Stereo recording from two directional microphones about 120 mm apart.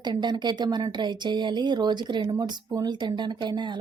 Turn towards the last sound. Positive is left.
turn(degrees=-40)  # may be behind; listen again after turning